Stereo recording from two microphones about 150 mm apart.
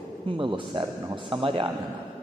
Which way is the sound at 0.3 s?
35° right (ahead or behind).